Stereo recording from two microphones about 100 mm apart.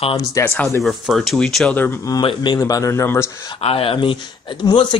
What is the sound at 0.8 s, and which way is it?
Speech, centre (ahead or behind).